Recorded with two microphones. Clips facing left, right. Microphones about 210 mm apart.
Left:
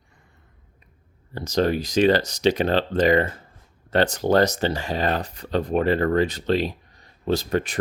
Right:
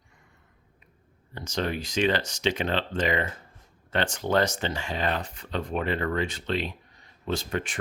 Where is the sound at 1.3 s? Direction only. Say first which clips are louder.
Left 8 dB; 35° left (ahead or behind).